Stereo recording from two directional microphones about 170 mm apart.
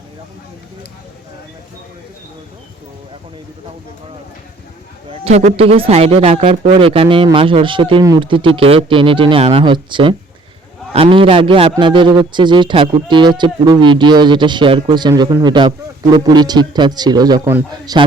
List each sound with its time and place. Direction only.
5.1 s speech: 40° right (ahead or behind); by 18.0 s 25° right (ahead or behind)